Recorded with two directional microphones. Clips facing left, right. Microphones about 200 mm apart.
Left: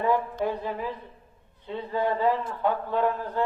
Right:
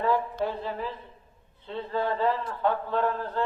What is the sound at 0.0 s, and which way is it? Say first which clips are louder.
A man's voice: left 1 dB; 20° left (ahead or behind).